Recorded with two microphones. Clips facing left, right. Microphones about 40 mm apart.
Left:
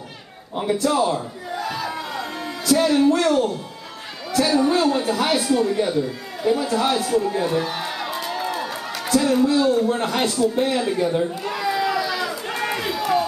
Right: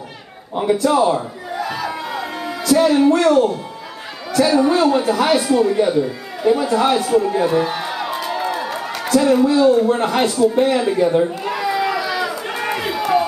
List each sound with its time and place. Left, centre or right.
0.8 s music: centre
2.6 s speech: centre
11.4 s run: centre